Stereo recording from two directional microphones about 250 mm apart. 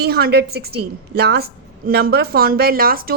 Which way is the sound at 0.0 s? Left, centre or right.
Right.